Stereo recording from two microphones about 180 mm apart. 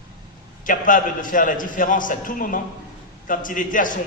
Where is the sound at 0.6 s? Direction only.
45° left (ahead or behind).